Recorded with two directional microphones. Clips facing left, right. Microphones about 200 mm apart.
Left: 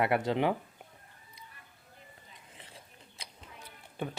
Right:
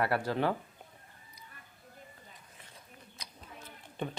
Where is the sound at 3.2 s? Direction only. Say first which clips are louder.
Left 3 dB; 30° left (ahead or behind).